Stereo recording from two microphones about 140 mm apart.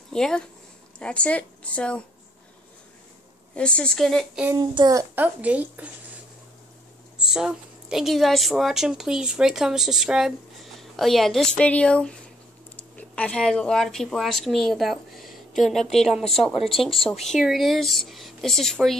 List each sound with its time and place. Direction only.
0.1 s speech: 5° left (ahead or behind)
3.5 s a woman's voice: 5° left (ahead or behind)
4.6 s a child's voice: 30° right (ahead or behind)
5.1 s a woman's voice: 10° right (ahead or behind)
7.2 s a woman's voice: 5° right (ahead or behind)